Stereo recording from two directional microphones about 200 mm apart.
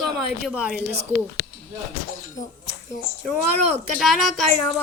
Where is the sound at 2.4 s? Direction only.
20° left (ahead or behind).